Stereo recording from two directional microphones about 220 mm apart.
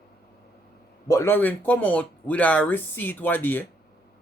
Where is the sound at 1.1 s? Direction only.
10° left (ahead or behind).